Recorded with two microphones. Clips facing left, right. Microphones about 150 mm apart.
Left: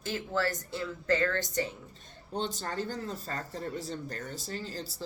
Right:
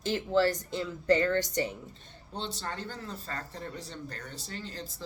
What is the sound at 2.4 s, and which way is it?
Speech, 45° left (ahead or behind).